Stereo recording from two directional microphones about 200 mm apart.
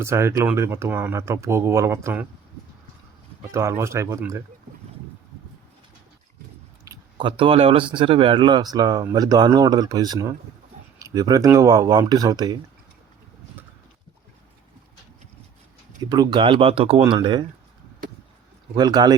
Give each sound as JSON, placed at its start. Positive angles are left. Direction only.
{"t": 0.0, "sound": "speech", "side_deg": -15}
{"t": 3.5, "sound": "speech", "side_deg": -15}
{"t": 6.8, "sound": "speech", "side_deg": -20}
{"t": 16.0, "sound": "speech", "side_deg": -20}
{"t": 18.7, "sound": "speech", "side_deg": -20}